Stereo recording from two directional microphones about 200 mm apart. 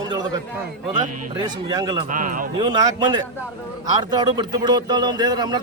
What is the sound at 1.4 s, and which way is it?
Speech, 20° right (ahead or behind).